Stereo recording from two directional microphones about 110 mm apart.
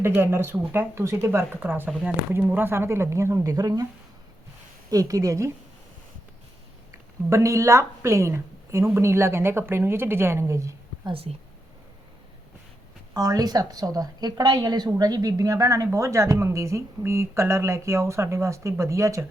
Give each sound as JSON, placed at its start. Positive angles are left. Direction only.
{"t": 0.0, "sound": "a woman's voice", "side_deg": -20}
{"t": 4.9, "sound": "a woman's voice", "side_deg": -30}
{"t": 6.9, "sound": "a woman's voice", "side_deg": -30}
{"t": 11.0, "sound": "speech", "side_deg": -60}
{"t": 13.1, "sound": "a woman's voice", "side_deg": -35}